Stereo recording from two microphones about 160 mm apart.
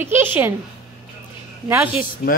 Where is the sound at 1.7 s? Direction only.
15° right (ahead or behind).